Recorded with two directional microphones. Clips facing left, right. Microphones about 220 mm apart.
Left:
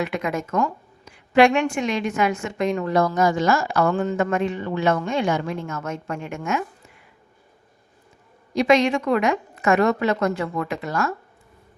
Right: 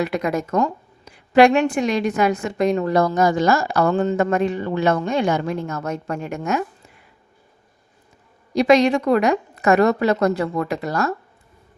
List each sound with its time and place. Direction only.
0.0 s speech: 35° right (ahead or behind)
8.5 s speech: 35° right (ahead or behind)